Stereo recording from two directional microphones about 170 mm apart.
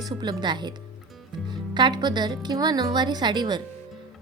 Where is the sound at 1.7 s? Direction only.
25° right (ahead or behind).